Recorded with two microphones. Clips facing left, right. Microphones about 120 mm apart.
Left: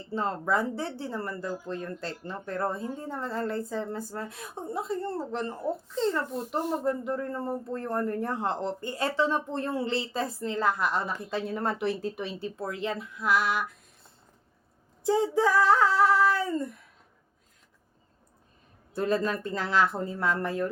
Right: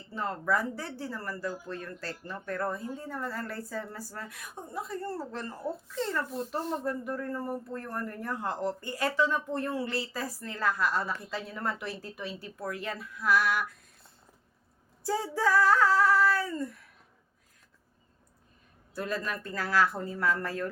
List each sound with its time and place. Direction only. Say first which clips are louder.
0.1 s speech: left 2 dB; 25° left (ahead or behind)
15.0 s speech: left 5 dB; 20° left (ahead or behind)
18.9 s speech: left 7 dB; 25° left (ahead or behind)